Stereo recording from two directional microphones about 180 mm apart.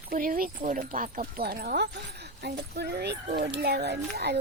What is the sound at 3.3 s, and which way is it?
Speech, 60° right (ahead or behind).